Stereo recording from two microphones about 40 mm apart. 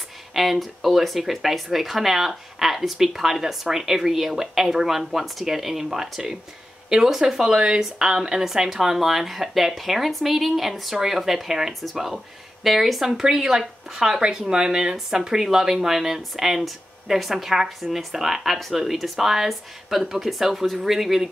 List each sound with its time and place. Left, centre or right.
0.3 s speech: centre
13.2 s speech: centre